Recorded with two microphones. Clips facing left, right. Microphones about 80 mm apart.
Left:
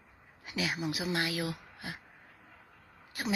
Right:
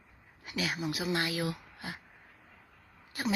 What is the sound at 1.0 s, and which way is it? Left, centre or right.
Speech, centre.